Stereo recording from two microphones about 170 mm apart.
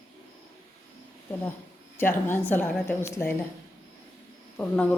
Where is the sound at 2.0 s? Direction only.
10° left (ahead or behind).